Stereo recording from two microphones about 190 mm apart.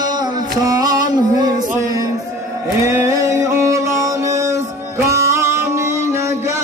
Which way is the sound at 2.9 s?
15° right (ahead or behind).